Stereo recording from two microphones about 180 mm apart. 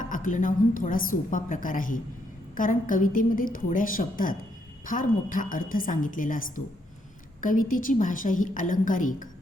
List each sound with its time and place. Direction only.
0.0 s a woman's voice: 45° left (ahead or behind)
7.4 s a woman's voice: 50° left (ahead or behind)